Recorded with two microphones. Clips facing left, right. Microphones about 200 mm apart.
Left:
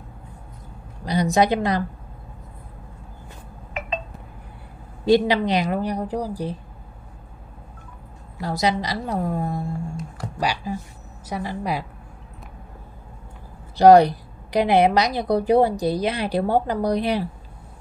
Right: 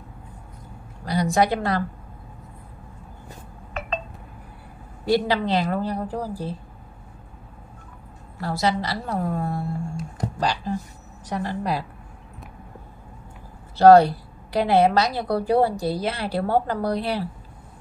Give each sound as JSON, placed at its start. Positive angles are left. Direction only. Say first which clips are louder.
{"t": 1.0, "sound": "a woman's voice", "louder": "left 2 dB", "side_deg": 20}
{"t": 5.0, "sound": "a woman's voice", "louder": "left 4 dB", "side_deg": 20}
{"t": 8.4, "sound": "a woman's voice", "louder": "left 1 dB", "side_deg": 20}
{"t": 13.7, "sound": "a woman's voice", "louder": "even", "side_deg": 15}